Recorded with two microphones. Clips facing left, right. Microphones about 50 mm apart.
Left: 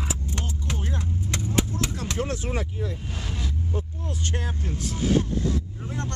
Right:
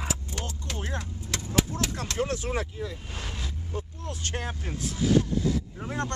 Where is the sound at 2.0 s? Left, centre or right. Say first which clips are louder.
Left 1 dB; centre.